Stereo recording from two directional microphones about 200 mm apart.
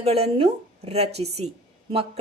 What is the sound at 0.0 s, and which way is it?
A woman's voice, 30° right (ahead or behind).